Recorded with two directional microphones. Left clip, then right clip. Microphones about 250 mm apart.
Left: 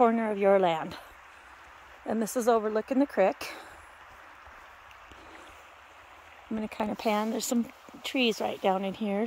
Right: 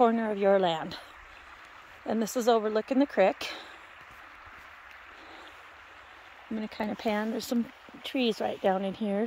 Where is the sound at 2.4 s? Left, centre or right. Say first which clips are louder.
Even; centre.